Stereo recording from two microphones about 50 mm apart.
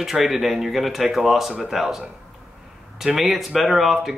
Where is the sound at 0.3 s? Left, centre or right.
Centre.